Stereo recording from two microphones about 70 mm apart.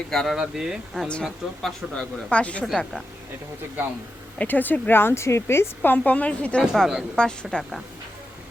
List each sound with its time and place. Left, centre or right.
0.1 s speech: centre
0.3 s speech: centre
2.3 s speech: centre
2.6 s speech: centre
4.4 s a woman's voice: left
6.1 s speech: centre
6.6 s speech: centre
7.2 s speech: centre